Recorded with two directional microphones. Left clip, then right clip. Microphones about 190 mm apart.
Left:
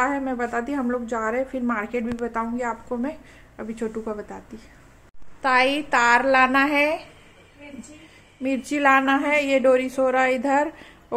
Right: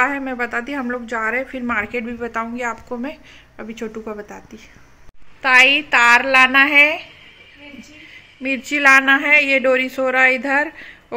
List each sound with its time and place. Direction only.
0.0 s speech: 5° left (ahead or behind)
5.4 s a woman's voice: 5° left (ahead or behind)
8.4 s speech: 5° left (ahead or behind)